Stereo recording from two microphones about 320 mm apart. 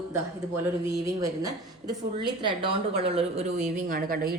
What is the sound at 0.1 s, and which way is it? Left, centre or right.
A woman's voice, centre.